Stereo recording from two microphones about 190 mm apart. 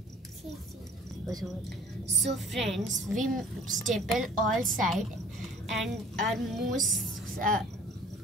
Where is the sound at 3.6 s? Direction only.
40° right (ahead or behind).